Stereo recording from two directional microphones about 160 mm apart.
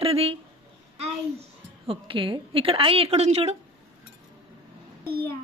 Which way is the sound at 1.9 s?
30° right (ahead or behind).